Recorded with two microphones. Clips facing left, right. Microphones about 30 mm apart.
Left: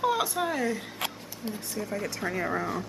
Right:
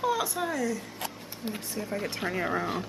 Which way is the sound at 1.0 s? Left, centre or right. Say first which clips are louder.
Left 7 dB; left.